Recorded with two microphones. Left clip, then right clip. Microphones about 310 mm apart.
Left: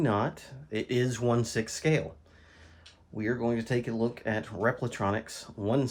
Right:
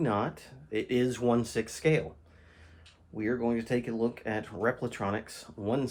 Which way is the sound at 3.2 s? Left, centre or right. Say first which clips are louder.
Even; left.